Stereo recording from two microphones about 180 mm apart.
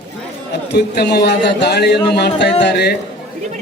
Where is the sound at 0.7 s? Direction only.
65° left (ahead or behind).